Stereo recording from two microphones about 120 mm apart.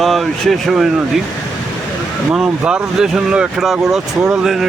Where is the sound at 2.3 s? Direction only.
10° right (ahead or behind).